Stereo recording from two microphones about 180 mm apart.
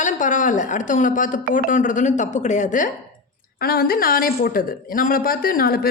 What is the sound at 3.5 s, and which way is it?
A woman's voice, 55° left (ahead or behind).